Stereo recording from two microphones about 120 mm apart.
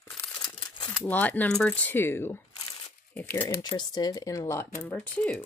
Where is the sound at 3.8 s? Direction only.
30° left (ahead or behind); by 5.4 s 10° left (ahead or behind).